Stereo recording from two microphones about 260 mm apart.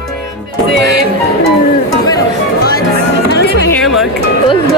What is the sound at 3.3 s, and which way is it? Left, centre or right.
Music, left.